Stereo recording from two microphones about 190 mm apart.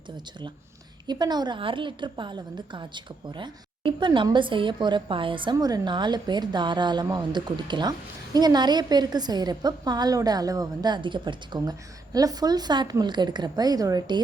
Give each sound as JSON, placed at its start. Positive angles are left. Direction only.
{"t": 1.0, "sound": "a woman's voice", "side_deg": -20}